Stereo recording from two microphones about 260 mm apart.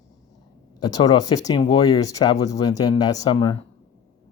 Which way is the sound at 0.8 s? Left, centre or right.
Centre.